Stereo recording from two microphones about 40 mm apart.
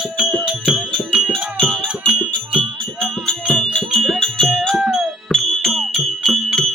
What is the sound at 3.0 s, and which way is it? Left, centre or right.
Music, centre.